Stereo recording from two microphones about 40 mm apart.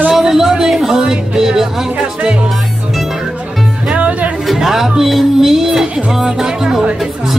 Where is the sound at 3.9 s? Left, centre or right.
Right.